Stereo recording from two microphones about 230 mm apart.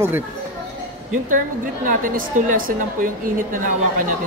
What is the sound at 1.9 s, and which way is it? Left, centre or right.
Speech, right.